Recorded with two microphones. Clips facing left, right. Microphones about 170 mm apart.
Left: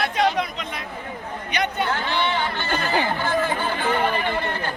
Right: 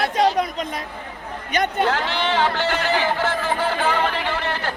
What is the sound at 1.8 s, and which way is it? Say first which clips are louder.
Speech: right 2 dB; 90° right.